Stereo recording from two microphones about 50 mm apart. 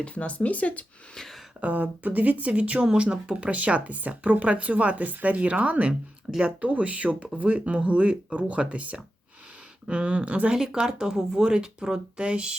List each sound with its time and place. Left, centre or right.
0.0 s speech: left
1.6 s speech: right
10.5 s speech: centre